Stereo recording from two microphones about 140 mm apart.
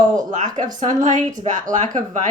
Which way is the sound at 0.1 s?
65° right (ahead or behind).